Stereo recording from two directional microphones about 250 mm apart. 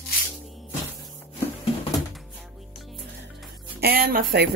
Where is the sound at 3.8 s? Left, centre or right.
Right.